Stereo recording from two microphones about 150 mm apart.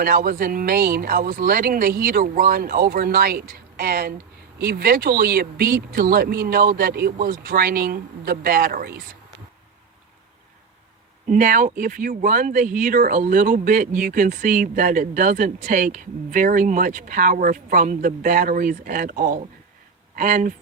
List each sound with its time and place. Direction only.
0.0 s speech: 75° right (ahead or behind)
11.3 s speech: 60° right (ahead or behind)